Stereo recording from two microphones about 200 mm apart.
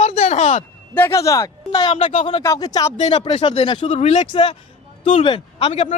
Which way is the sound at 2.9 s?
35° left (ahead or behind).